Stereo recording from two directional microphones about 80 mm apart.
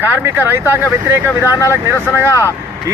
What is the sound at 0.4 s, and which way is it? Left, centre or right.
Speech, right.